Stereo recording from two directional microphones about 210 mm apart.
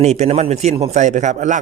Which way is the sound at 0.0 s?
30° right (ahead or behind).